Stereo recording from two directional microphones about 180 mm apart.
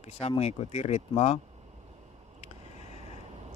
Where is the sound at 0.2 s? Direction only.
35° left (ahead or behind).